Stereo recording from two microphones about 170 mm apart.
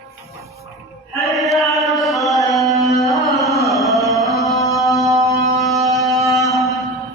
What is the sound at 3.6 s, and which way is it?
Carnatic music, centre (ahead or behind).